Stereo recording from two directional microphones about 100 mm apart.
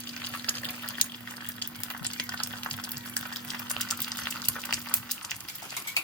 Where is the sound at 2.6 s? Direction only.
15° left (ahead or behind).